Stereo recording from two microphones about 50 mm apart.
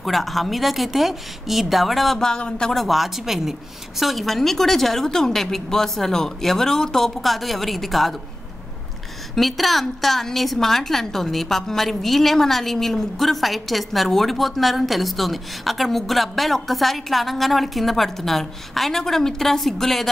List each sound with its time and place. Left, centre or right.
0.0 s a woman's voice: centre
2.1 s speech: centre
2.7 s a woman's voice: centre
9.3 s a woman's voice: centre